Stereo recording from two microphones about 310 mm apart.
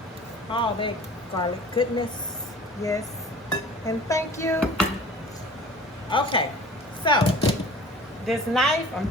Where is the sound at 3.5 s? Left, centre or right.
Centre.